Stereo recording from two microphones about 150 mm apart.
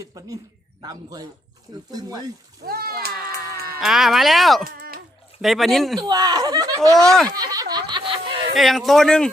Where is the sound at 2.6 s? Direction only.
90° right.